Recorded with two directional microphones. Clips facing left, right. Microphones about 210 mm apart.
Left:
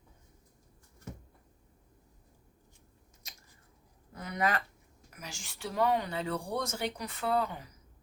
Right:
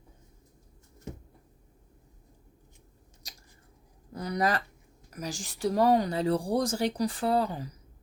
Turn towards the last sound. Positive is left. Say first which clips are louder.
# right 4 dB
turn(degrees=-35)  # may be behind; listen again after turning